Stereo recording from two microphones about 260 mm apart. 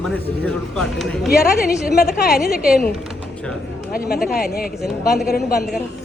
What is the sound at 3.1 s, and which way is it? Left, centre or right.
Typing, centre.